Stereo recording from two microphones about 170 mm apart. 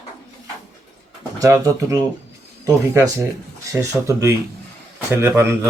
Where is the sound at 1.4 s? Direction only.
20° right (ahead or behind).